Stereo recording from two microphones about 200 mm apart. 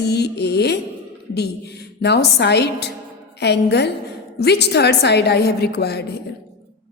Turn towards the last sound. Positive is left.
turn(degrees=55)  # may be behind; listen again after turning